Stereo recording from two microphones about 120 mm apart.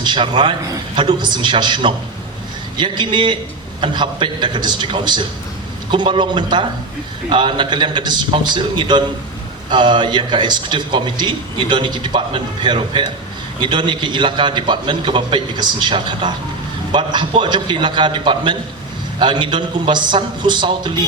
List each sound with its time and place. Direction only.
0.0 s a man's voice: 40° right (ahead or behind)